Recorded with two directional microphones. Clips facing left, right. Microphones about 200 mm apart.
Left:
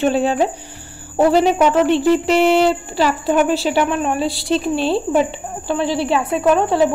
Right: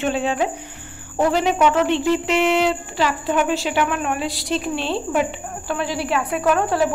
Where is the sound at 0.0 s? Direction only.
35° left (ahead or behind).